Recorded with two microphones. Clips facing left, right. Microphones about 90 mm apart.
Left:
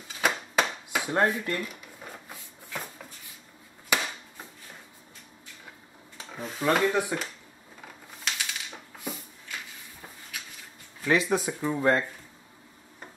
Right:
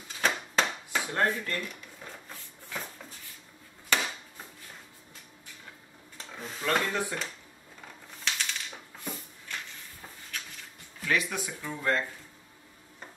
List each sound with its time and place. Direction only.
0.2 s a sound: 10° left (ahead or behind)
1.1 s speech: 15° left (ahead or behind)
3.9 s chop: 10° left (ahead or behind)
6.1 s speech: 10° left (ahead or behind)
7.8 s a sound: 5° left (ahead or behind)
11.1 s speech: 30° left (ahead or behind)